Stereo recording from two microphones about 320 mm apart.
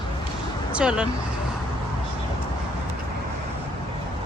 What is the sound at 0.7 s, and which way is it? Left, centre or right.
Speech, centre.